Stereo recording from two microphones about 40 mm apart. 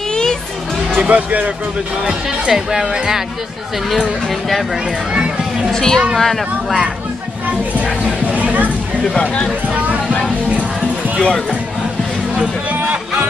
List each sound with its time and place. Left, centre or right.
0.1 s music: centre
0.9 s speech: right
2.5 s speech: centre
4.3 s speech: centre
5.1 s a sound: right
5.7 s speech: centre
7.8 s speech: right
8.4 s speech: right
9.7 s a sound: right
11.1 s speech: centre
12.9 s music: right